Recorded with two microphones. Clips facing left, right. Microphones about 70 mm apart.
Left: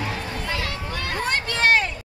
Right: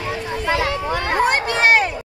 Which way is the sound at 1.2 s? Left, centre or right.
Centre.